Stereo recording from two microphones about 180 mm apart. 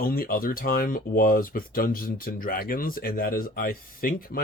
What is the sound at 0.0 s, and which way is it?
Speech, 55° left (ahead or behind).